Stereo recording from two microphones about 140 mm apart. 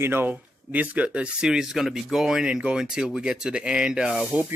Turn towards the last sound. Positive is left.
turn(degrees=-10)  # may be behind; listen again after turning